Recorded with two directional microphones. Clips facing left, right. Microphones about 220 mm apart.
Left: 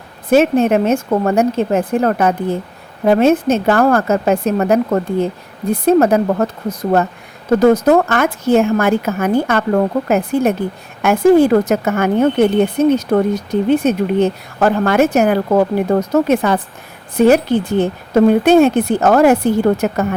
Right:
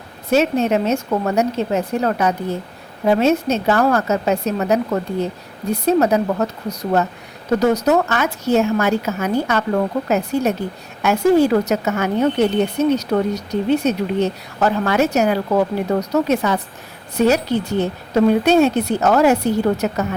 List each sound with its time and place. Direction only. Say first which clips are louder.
0.3 s a woman's voice: left 5 dB; 50° left (ahead or behind)